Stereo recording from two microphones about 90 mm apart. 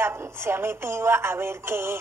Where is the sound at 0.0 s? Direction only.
30° right (ahead or behind).